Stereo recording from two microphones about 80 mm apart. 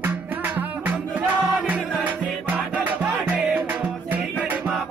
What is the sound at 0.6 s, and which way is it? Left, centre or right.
Music, right.